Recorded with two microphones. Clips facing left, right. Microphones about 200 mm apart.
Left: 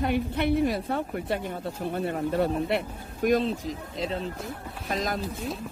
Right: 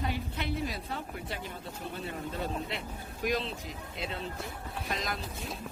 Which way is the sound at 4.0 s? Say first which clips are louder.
Left 5 dB; 35° left (ahead or behind).